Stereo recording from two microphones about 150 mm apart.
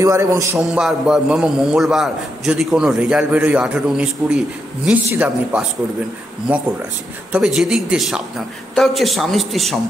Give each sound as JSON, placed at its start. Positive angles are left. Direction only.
{"t": 0.0, "sound": "a man's voice", "side_deg": -20}
{"t": 0.6, "sound": "a man's voice", "side_deg": -5}
{"t": 7.3, "sound": "a man's voice", "side_deg": -5}